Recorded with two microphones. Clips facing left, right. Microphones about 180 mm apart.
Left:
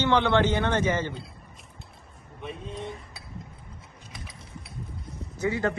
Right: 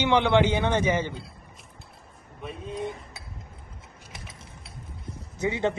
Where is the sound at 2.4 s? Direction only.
Centre (ahead or behind).